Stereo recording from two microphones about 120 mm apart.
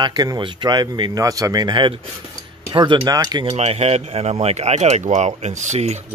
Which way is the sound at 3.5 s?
60° right (ahead or behind).